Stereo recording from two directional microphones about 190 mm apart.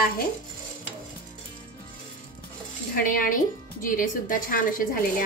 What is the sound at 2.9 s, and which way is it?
A woman's voice, 45° left (ahead or behind).